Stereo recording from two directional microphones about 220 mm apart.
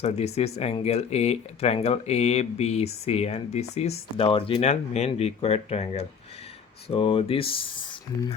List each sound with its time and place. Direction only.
0.0 s speech: 30° left (ahead or behind)